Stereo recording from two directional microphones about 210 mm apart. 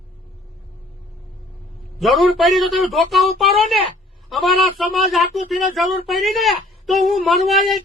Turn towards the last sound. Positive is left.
turn(degrees=0)  # may be behind; listen again after turning